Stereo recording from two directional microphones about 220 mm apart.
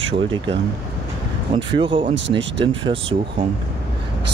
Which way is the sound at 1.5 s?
20° right (ahead or behind).